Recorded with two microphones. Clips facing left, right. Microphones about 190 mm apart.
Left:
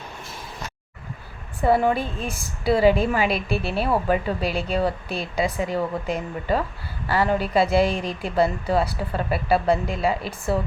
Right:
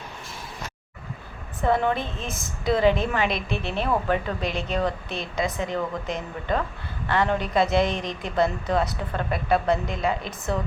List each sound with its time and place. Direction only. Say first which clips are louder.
1.6 s a woman's voice: left 3 dB; 10° left (ahead or behind)
5.0 s a woman's voice: left 3 dB; 35° left (ahead or behind)
5.5 s a woman's voice: left 3 dB; 10° left (ahead or behind)